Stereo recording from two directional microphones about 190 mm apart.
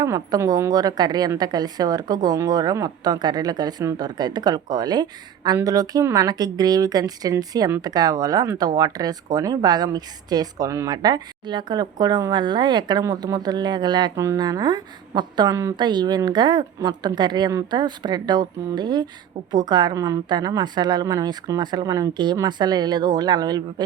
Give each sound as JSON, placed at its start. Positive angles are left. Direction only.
{"t": 0.0, "sound": "a woman's voice", "side_deg": -20}